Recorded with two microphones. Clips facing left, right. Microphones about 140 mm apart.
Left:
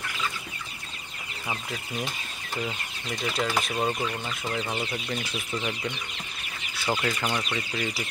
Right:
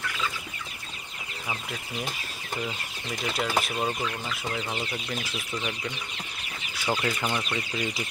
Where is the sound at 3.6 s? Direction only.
Centre (ahead or behind).